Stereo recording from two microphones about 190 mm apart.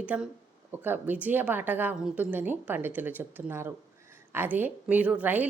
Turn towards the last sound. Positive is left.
turn(degrees=-10)  # may be behind; listen again after turning